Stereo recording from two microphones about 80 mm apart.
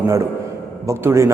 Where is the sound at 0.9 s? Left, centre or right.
Right.